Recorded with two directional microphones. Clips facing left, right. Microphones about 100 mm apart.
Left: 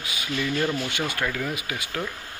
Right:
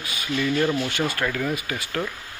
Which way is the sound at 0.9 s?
15° left (ahead or behind).